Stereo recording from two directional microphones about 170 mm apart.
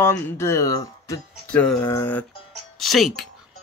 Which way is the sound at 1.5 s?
5° left (ahead or behind).